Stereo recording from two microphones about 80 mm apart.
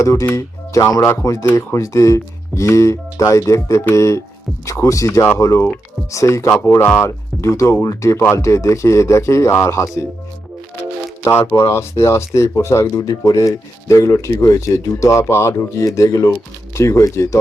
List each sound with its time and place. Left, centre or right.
0.0 s speech: left
11.2 s speech: left